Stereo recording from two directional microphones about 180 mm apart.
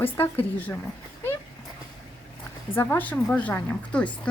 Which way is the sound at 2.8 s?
10° left (ahead or behind).